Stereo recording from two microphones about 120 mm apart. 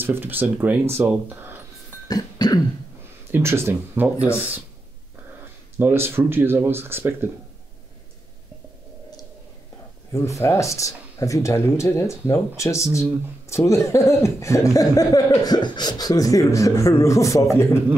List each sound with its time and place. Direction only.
0.0 s speech: 15° right (ahead or behind)
2.0 s cough: 30° left (ahead or behind)
3.3 s speech: 20° right (ahead or behind)
5.8 s speech: 20° right (ahead or behind)
10.1 s speech: 25° left (ahead or behind)